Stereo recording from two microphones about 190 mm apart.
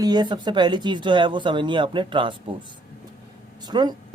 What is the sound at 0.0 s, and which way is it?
Speech, 20° right (ahead or behind).